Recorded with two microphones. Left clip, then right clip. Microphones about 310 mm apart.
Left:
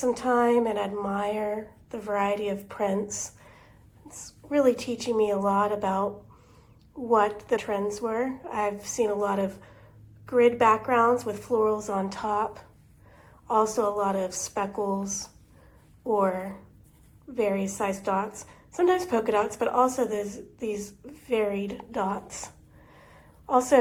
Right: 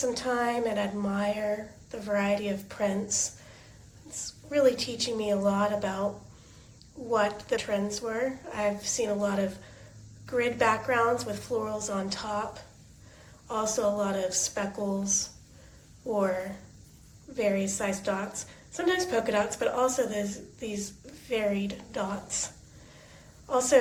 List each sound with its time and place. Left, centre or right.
0.0 s a woman's voice: centre
7.1 s a woman's voice: centre
17.3 s a woman's voice: centre
23.5 s speech: centre